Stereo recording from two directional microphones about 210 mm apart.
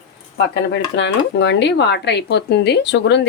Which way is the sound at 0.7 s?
55° left (ahead or behind).